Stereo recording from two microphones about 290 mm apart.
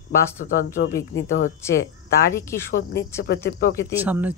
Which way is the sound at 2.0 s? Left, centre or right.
Left.